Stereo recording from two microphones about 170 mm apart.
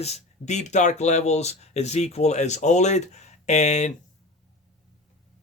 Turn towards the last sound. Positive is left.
turn(degrees=40)  # may be behind; listen again after turning